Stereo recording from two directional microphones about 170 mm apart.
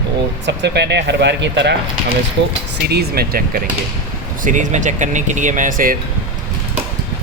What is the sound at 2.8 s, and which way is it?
Speech, 70° right (ahead or behind).